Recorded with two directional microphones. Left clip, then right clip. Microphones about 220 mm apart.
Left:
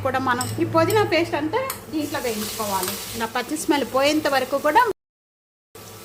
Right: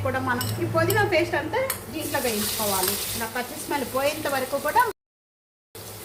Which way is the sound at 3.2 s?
50° left (ahead or behind).